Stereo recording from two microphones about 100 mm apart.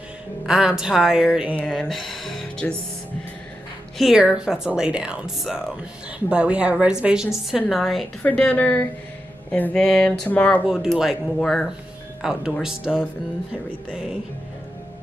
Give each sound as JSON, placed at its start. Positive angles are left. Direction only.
{"t": 0.5, "sound": "a woman's voice", "side_deg": -5}
{"t": 1.6, "sound": "speech", "side_deg": 5}
{"t": 4.0, "sound": "a woman's voice", "side_deg": -10}
{"t": 8.2, "sound": "a sound", "side_deg": 10}
{"t": 10.9, "sound": "a woman's voice", "side_deg": -5}